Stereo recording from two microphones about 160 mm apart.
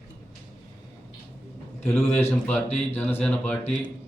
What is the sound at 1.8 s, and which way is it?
A man's voice, 10° left (ahead or behind).